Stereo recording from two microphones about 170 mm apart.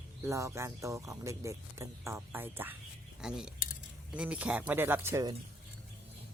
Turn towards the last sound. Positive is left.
turn(degrees=-20)  # may be behind; listen again after turning